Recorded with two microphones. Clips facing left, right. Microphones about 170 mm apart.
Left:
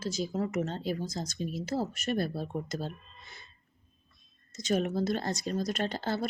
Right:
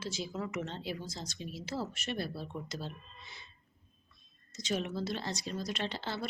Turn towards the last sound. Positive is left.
turn(degrees=45)  # may be behind; listen again after turning